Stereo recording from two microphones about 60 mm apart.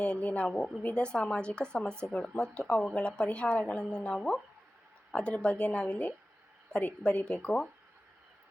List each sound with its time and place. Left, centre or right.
0.0 s a woman's voice: centre